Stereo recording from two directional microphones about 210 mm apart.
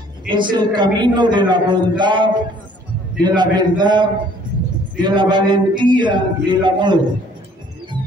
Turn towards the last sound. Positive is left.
turn(degrees=-20)  # may be behind; listen again after turning